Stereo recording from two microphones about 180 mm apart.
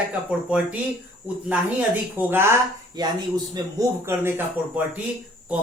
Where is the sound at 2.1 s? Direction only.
15° right (ahead or behind).